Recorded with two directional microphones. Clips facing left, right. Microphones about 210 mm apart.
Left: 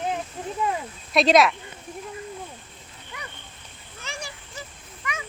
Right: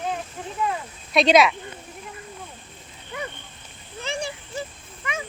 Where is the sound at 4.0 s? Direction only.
30° right (ahead or behind).